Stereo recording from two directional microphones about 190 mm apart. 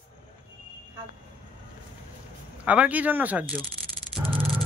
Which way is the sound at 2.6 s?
5° right (ahead or behind).